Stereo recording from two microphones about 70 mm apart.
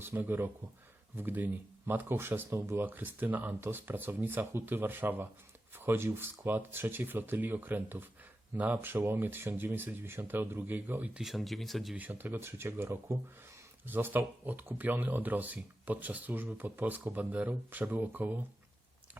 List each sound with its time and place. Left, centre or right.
0.0 s speech: right
2.8 s speech: right
11.1 s speech: centre
11.9 s speech: right